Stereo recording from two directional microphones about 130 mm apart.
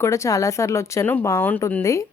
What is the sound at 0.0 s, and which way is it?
A woman's voice, 25° left (ahead or behind).